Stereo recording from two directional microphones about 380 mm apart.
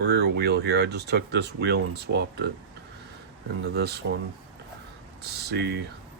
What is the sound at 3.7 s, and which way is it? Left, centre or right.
Speech, right.